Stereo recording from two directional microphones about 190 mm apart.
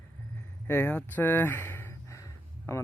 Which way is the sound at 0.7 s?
10° left (ahead or behind).